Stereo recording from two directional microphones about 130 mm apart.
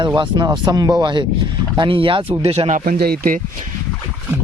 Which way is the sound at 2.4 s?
55° right (ahead or behind).